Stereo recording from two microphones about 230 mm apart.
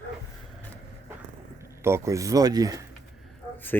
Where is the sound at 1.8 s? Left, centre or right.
Centre.